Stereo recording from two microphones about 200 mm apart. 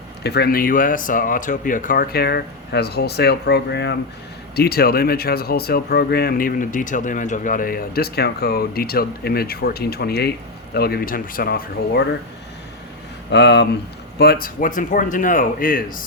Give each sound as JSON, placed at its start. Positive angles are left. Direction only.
{"t": 0.2, "sound": "speech", "side_deg": 55}
{"t": 13.3, "sound": "speech", "side_deg": 60}
{"t": 14.2, "sound": "speech", "side_deg": 50}